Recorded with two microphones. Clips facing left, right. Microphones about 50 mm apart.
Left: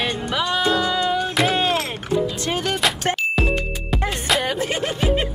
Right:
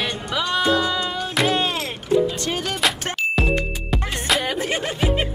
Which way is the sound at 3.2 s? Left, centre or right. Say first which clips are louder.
Even; centre.